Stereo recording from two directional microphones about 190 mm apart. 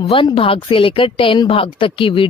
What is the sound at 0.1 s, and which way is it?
A woman's voice, 30° left (ahead or behind).